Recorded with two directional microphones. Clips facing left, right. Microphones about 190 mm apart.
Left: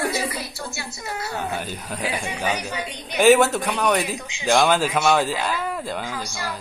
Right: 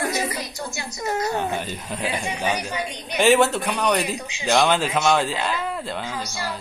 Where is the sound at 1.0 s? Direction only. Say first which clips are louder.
Right 8 dB; 45° right (ahead or behind).